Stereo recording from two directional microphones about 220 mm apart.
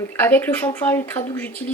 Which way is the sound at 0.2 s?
10° left (ahead or behind).